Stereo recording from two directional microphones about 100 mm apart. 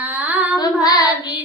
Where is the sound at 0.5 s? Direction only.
45° left (ahead or behind).